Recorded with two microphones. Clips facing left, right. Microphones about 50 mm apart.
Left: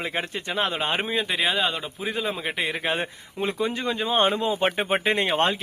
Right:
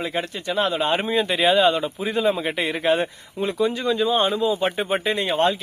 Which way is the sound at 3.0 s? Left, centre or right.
Left.